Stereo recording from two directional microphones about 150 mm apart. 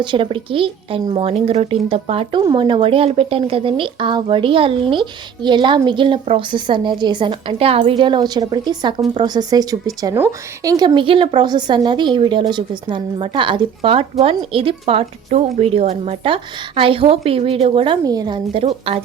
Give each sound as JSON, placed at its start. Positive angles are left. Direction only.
{"t": 0.0, "sound": "speech", "side_deg": -35}